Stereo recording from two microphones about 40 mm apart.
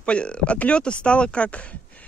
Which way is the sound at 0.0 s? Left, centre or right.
Left.